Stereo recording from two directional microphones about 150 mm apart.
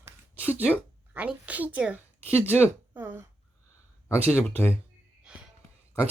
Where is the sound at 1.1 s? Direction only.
10° right (ahead or behind).